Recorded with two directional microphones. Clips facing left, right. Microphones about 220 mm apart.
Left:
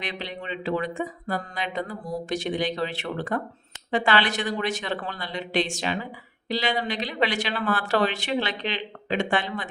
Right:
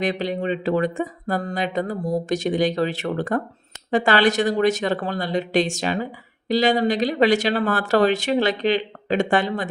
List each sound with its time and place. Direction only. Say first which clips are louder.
0.0 s speech: right 11 dB; 45° right (ahead or behind)